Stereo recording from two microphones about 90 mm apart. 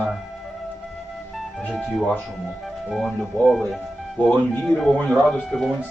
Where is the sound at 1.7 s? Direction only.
Centre (ahead or behind).